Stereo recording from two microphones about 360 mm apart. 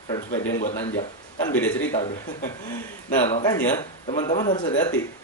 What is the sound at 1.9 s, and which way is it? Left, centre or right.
A man's voice, centre.